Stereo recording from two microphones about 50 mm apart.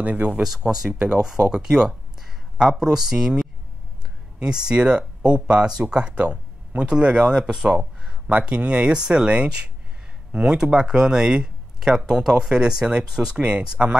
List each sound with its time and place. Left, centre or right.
0.0 s speech: right
0.4 s speech: centre
7.2 s speech: centre